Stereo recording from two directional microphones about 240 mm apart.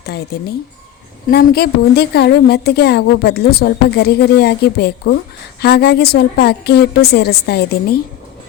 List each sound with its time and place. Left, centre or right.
0.0 s a woman's voice: left